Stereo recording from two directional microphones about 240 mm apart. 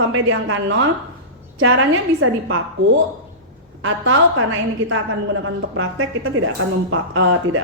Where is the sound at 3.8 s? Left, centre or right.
Right.